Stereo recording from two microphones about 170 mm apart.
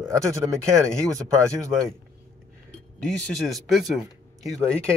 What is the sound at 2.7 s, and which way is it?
Speech, centre (ahead or behind).